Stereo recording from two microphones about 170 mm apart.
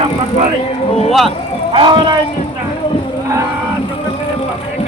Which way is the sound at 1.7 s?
30° right (ahead or behind).